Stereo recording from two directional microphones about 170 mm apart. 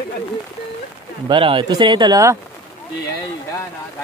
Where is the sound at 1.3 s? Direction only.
30° right (ahead or behind).